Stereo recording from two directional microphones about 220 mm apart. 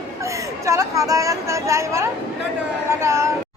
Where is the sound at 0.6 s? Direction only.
15° right (ahead or behind).